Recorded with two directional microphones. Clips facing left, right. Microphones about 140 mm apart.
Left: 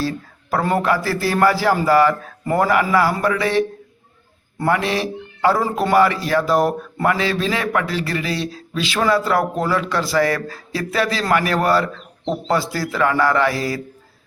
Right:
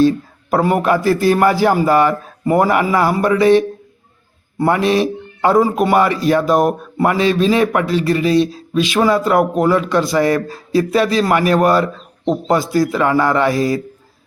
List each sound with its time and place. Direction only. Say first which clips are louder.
0.0 s speech: right 11 dB; 20° right (ahead or behind)
4.6 s speech: right 5 dB; 20° right (ahead or behind)